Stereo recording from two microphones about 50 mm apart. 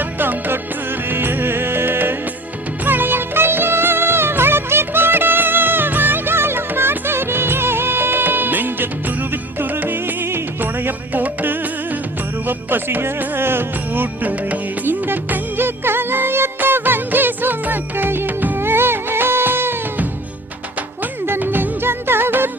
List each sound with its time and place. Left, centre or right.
0.0 s music: right
21.2 s music: right